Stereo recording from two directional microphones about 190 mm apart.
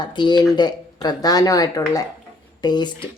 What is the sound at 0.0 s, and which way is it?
Speech, 25° left (ahead or behind).